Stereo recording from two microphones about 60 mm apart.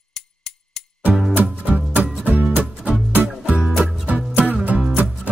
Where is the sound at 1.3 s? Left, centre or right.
Right.